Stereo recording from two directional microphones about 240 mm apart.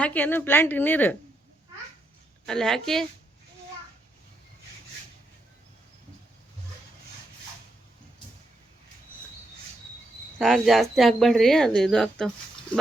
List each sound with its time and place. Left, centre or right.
0.0 s a woman's voice: centre
2.5 s speech: centre
10.3 s speech: centre